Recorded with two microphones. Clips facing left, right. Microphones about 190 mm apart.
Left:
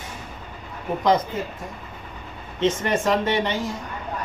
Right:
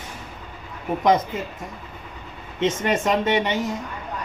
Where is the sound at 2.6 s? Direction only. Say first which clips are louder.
Even; 20° right (ahead or behind).